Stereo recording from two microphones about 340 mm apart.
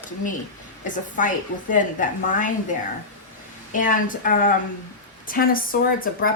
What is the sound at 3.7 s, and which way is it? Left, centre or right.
A woman's voice, left.